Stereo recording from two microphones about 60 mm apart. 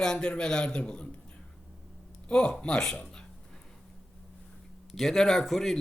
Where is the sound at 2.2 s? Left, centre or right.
Centre.